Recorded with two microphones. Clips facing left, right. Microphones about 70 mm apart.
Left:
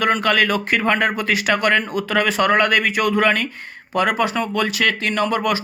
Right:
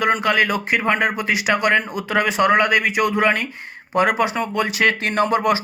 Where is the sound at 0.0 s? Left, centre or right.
Centre.